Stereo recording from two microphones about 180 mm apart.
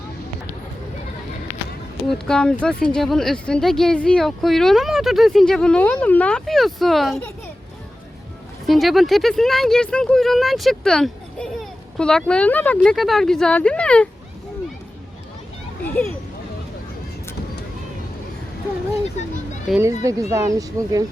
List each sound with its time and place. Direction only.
2.0 s speech: 5° left (ahead or behind)
8.6 s speech: centre (ahead or behind)
15.8 s speech: 10° left (ahead or behind)
19.2 s speech: 40° left (ahead or behind)
19.8 s speech: 15° right (ahead or behind)